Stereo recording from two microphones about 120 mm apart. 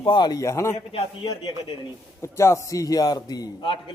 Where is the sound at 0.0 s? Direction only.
40° left (ahead or behind); by 0.8 s 25° left (ahead or behind).